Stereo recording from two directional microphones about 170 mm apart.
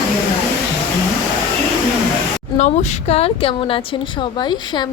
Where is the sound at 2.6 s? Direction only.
40° left (ahead or behind).